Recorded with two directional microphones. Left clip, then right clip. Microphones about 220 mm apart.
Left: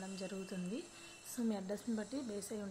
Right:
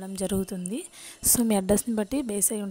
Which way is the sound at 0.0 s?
50° right (ahead or behind).